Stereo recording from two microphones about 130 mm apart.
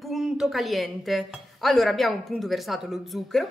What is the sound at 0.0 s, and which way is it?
Speech, 5° right (ahead or behind).